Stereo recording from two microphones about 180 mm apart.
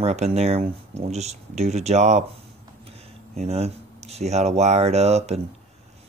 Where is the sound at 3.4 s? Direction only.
35° right (ahead or behind).